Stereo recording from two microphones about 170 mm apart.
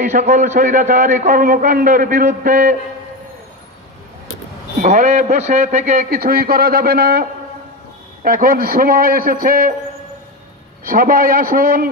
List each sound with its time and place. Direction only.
0.0 s a man's voice: 45° right (ahead or behind)
4.8 s a man's voice: 50° right (ahead or behind)
6.0 s a man's voice: 65° right (ahead or behind)
10.8 s a man's voice: 55° right (ahead or behind)